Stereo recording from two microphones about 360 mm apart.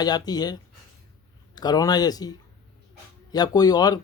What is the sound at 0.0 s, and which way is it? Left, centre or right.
Speech, centre.